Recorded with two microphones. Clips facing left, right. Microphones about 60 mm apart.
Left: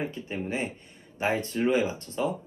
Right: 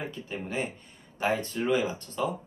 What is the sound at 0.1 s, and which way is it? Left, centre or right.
Speech, left.